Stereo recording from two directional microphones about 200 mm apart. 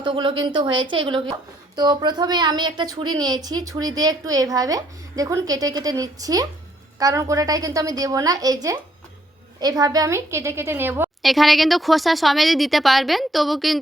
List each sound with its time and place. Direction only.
0.0 s a woman's voice: 25° right (ahead or behind)
11.2 s speech: centre (ahead or behind)